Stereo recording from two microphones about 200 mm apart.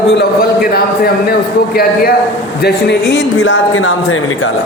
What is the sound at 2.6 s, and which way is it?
Speech, 60° left (ahead or behind).